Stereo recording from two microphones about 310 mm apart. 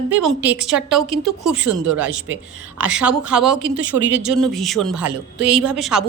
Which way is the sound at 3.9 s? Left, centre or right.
Right.